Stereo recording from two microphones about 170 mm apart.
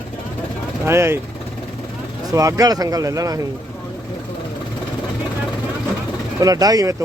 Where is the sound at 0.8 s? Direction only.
15° right (ahead or behind).